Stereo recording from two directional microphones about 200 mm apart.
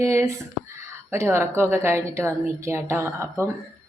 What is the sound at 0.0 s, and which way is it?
A woman's voice, 15° right (ahead or behind).